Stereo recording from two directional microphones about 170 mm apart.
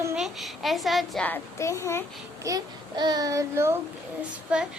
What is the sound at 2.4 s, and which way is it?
Child singing, 20° right (ahead or behind).